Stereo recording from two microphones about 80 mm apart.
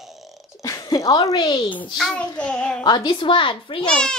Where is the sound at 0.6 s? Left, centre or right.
Left.